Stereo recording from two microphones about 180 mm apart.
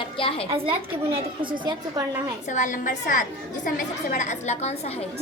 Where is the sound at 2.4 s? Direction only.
45° left (ahead or behind).